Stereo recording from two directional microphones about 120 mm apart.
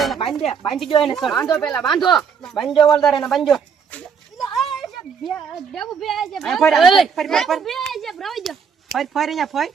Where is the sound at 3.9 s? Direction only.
15° left (ahead or behind).